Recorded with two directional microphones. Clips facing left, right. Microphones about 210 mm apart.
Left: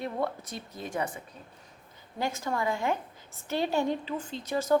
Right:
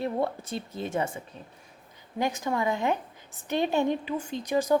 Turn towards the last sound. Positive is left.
turn(degrees=-15)  # may be behind; listen again after turning